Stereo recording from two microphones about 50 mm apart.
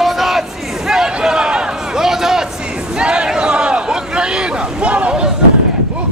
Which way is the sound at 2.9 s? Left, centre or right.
Centre.